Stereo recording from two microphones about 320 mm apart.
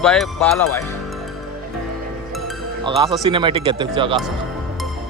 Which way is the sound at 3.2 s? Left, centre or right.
Centre.